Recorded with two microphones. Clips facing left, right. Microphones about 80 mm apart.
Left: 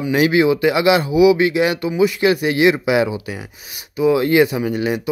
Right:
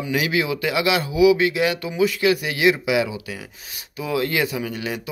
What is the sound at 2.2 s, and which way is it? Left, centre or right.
Speech, left.